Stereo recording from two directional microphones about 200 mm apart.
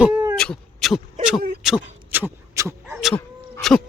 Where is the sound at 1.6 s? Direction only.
5° right (ahead or behind).